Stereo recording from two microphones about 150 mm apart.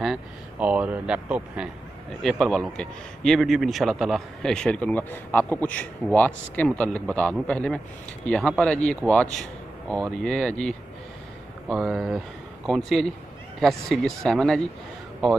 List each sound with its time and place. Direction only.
0.0 s a man's voice: 5° right (ahead or behind)
11.7 s a man's voice: centre (ahead or behind)